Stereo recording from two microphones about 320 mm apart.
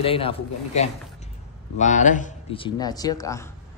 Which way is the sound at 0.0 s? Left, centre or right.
Centre.